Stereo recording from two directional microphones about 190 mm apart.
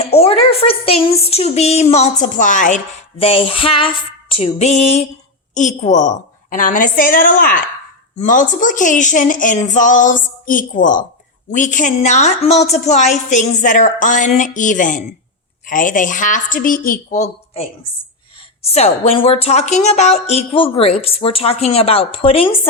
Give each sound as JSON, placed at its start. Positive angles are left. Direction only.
{"t": 0.0, "sound": "speech", "side_deg": 30}